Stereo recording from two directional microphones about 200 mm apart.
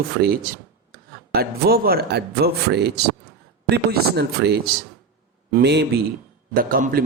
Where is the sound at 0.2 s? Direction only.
45° right (ahead or behind).